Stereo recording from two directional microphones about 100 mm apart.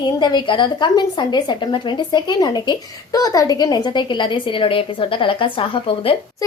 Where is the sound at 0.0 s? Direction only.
45° left (ahead or behind).